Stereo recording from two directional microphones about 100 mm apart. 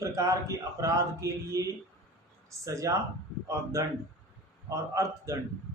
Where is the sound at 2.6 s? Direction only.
30° right (ahead or behind).